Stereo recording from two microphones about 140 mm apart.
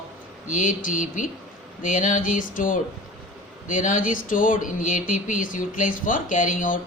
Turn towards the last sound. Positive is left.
turn(degrees=70)  # may be behind; listen again after turning